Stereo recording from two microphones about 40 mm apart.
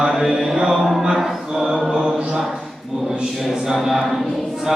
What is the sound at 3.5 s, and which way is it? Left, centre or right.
Speech, centre.